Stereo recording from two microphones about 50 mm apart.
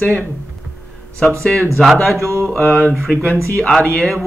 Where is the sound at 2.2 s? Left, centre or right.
Right.